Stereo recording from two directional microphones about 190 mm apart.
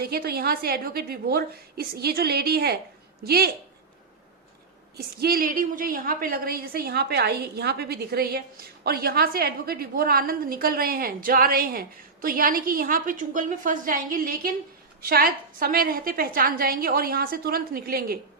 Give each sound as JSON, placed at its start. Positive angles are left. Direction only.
{"t": 0.0, "sound": "a woman's voice", "side_deg": -55}
{"t": 4.9, "sound": "a woman's voice", "side_deg": -50}